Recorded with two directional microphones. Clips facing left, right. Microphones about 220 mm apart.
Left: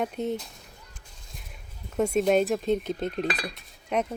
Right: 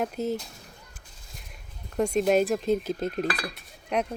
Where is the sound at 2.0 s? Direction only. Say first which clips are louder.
Even; 5° left (ahead or behind).